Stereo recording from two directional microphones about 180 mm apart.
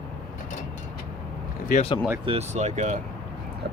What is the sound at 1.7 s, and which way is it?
Speech, 45° left (ahead or behind).